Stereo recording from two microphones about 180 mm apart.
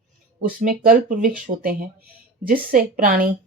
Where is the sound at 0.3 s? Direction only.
50° right (ahead or behind).